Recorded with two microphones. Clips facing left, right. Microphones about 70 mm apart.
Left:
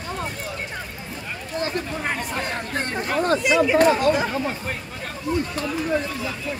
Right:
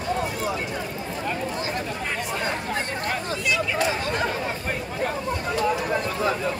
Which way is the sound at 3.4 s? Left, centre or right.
Centre.